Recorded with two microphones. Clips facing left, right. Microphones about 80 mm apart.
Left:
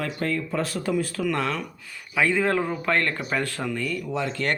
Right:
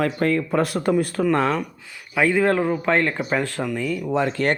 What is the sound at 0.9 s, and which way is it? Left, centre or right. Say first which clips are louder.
Speech: right 5 dB; right.